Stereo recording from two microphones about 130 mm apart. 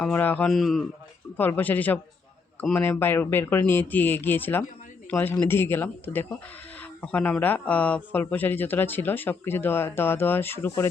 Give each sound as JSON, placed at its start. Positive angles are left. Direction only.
{"t": 0.0, "sound": "speech", "side_deg": 15}
{"t": 0.5, "sound": "a man's voice", "side_deg": 0}
{"t": 1.4, "sound": "speech", "side_deg": 15}